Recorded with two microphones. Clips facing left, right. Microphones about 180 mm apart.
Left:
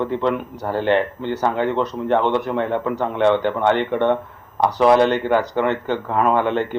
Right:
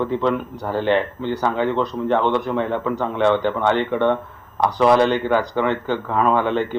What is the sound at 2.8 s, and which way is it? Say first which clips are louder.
Speech: left 1 dB; 10° left (ahead or behind).